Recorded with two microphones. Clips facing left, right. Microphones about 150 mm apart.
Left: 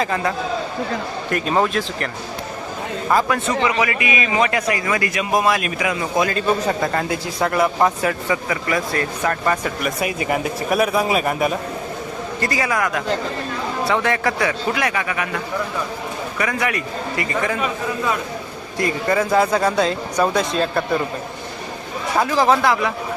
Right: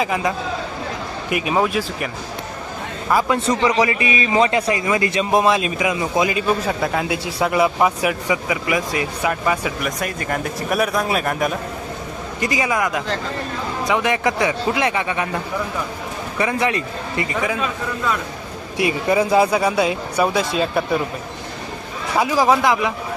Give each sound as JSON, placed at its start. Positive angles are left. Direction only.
{"t": 0.0, "sound": "speech", "side_deg": -15}
{"t": 3.2, "sound": "a man's voice", "side_deg": -30}
{"t": 6.7, "sound": "a man's voice", "side_deg": -5}
{"t": 10.0, "sound": "a man's voice", "side_deg": 5}
{"t": 12.4, "sound": "a man's voice", "side_deg": -15}
{"t": 16.4, "sound": "a man's voice", "side_deg": -25}
{"t": 18.8, "sound": "speech", "side_deg": -15}
{"t": 22.2, "sound": "speech", "side_deg": -10}